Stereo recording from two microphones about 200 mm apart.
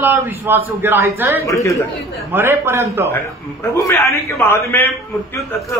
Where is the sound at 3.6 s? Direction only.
10° left (ahead or behind).